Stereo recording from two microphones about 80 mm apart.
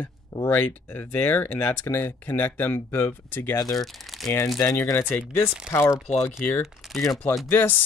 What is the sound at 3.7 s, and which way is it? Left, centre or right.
Speech, centre.